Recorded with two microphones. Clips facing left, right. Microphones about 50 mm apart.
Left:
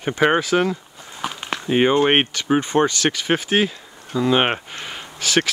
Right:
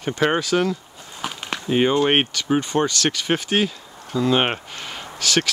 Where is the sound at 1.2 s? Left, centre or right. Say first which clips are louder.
Left 2 dB; centre.